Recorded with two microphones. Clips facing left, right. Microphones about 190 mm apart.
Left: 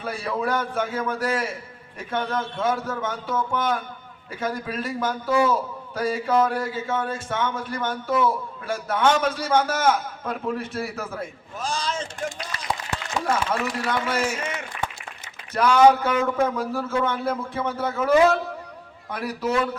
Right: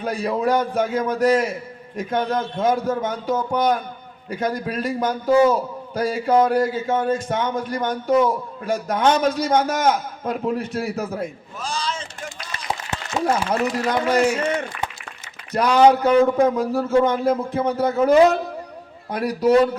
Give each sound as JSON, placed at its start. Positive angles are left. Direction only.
{"t": 0.0, "sound": "a man's voice", "side_deg": -40}
{"t": 11.7, "sound": "speech", "side_deg": 50}
{"t": 13.2, "sound": "a man's voice", "side_deg": -40}
{"t": 15.5, "sound": "a man's voice", "side_deg": -35}
{"t": 19.4, "sound": "a man's voice", "side_deg": -35}